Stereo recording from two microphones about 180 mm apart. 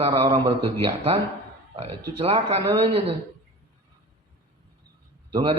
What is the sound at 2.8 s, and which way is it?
Speech, 30° right (ahead or behind).